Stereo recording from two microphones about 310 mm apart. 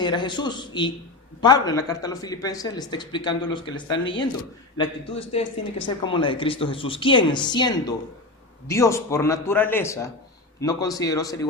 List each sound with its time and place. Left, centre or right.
0.0 s a man's voice: centre